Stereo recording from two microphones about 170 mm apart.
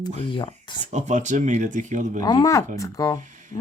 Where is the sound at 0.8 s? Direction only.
45° right (ahead or behind).